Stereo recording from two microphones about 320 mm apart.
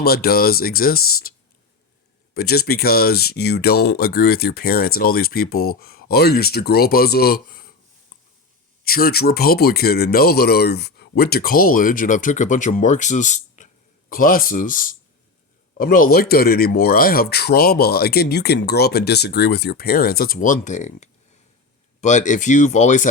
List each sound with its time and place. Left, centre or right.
0.0 s speech: left
2.3 s speech: left
8.8 s speech: left